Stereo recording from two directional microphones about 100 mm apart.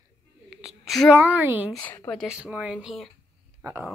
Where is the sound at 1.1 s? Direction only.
15° right (ahead or behind).